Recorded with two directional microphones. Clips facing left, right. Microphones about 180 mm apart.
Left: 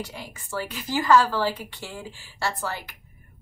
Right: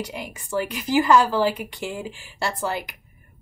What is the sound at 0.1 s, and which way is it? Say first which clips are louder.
A woman's voice: right 6 dB; 15° right (ahead or behind).